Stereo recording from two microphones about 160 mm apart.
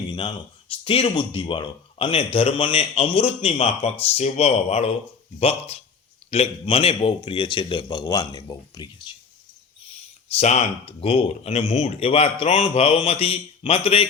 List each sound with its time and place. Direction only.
0.1 s a man's voice: 35° left (ahead or behind)
10.3 s speech: 45° left (ahead or behind)